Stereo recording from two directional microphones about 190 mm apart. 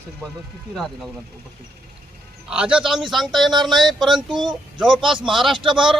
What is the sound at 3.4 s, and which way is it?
Speech, 25° right (ahead or behind).